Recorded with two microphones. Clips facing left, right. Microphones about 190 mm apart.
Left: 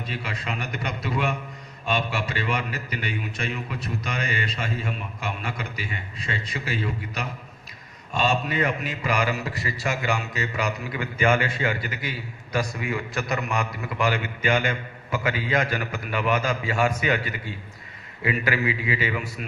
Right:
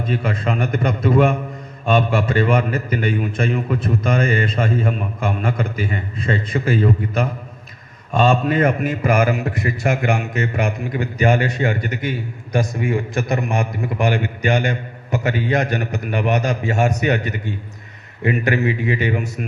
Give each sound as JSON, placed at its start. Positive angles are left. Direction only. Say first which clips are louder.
{"t": 0.0, "sound": "a man's voice", "louder": "right 11 dB", "side_deg": -50}